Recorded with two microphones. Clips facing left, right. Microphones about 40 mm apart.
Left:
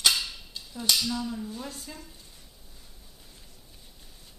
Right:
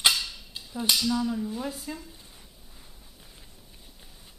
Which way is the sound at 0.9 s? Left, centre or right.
Centre.